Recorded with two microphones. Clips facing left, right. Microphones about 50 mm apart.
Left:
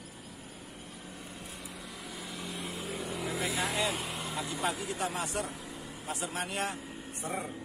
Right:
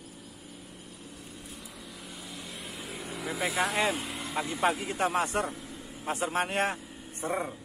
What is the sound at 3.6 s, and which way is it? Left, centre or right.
Speech, right.